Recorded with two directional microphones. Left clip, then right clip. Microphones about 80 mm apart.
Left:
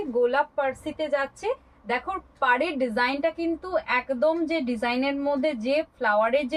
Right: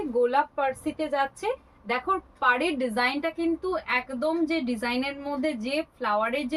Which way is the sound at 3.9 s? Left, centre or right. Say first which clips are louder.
Left 5 dB; right.